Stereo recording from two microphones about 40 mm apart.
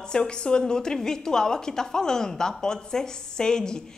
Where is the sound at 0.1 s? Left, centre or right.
Left.